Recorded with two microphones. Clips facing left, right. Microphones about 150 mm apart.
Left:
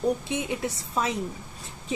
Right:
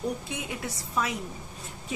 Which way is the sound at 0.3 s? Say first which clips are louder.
Left 6 dB; 25° left (ahead or behind).